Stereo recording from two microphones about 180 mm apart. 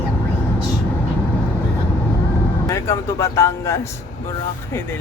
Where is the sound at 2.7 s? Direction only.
15° left (ahead or behind).